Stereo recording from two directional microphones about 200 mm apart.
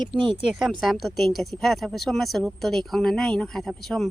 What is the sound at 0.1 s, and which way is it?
Speech, 25° right (ahead or behind).